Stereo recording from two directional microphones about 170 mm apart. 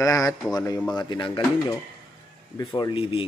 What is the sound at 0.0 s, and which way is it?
Speech, 20° left (ahead or behind).